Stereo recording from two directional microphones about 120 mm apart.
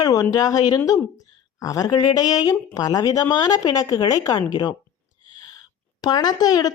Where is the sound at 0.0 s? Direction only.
30° left (ahead or behind).